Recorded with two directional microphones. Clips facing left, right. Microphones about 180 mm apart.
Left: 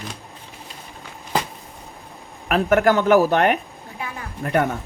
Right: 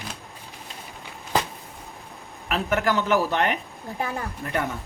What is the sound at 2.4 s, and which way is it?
Speech, 55° left (ahead or behind).